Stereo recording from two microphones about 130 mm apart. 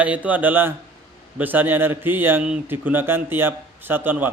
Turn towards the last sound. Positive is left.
turn(degrees=-15)  # may be behind; listen again after turning